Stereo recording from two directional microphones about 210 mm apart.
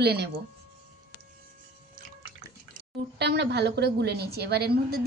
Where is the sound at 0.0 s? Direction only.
50° right (ahead or behind).